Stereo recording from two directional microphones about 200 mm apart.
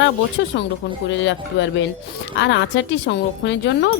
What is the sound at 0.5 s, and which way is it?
A woman's voice, 60° left (ahead or behind).